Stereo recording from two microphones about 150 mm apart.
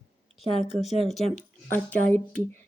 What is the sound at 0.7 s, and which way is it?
Speech, centre (ahead or behind).